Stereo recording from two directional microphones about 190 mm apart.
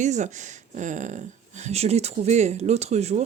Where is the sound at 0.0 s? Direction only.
40° right (ahead or behind).